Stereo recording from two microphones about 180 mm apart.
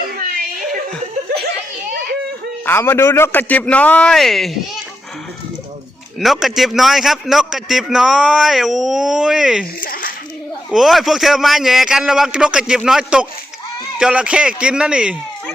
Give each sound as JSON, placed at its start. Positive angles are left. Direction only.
{"t": 2.6, "sound": "a man's voice", "side_deg": 10}
{"t": 6.1, "sound": "a man's voice", "side_deg": 0}
{"t": 9.8, "sound": "a sound", "side_deg": 50}
{"t": 10.7, "sound": "a man's voice", "side_deg": 0}